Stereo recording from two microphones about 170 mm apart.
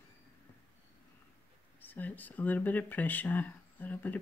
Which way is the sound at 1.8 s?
10° left (ahead or behind).